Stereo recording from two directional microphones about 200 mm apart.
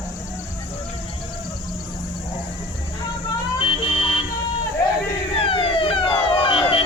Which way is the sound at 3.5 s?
25° left (ahead or behind).